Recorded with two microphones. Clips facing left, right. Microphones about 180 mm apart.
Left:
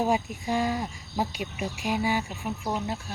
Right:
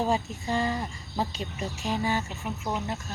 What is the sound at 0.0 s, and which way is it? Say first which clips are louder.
Speech: left 1 dB; 10° left (ahead or behind).